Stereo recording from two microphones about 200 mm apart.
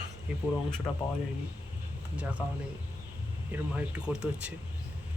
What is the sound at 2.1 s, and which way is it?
Speech, 5° right (ahead or behind).